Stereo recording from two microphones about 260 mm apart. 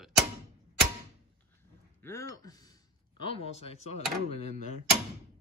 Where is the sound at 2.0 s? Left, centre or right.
Centre.